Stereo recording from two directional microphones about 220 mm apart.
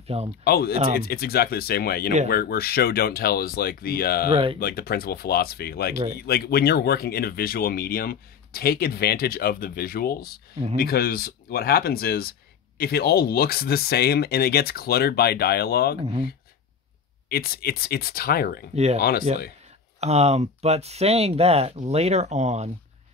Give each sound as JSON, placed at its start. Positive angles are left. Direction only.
{"t": 0.4, "sound": "speech", "side_deg": 45}
{"t": 4.3, "sound": "speech", "side_deg": -25}
{"t": 4.6, "sound": "speech", "side_deg": 45}
{"t": 16.0, "sound": "speech", "side_deg": -25}
{"t": 17.3, "sound": "speech", "side_deg": 45}
{"t": 20.0, "sound": "speech", "side_deg": -30}